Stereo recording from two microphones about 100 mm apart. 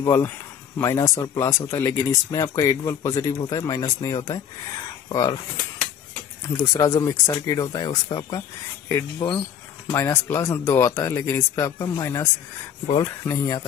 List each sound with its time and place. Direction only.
0.0 s speech: 30° left (ahead or behind)
6.5 s speech: 35° left (ahead or behind)